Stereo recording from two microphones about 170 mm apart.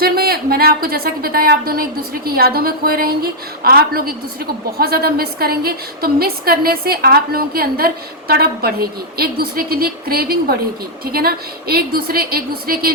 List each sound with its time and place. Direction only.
0.0 s a woman's voice: 60° right (ahead or behind)